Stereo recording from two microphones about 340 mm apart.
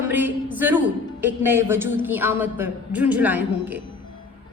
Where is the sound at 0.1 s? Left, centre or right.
Centre.